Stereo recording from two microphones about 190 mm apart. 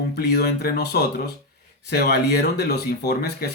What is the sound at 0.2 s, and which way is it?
Speech, 55° left (ahead or behind).